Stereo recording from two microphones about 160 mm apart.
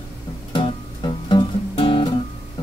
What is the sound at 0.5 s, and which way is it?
Music, 30° left (ahead or behind).